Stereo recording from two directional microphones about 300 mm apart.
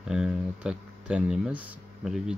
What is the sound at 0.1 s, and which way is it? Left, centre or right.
Speech, centre.